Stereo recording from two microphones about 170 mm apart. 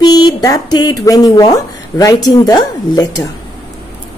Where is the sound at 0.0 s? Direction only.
25° left (ahead or behind).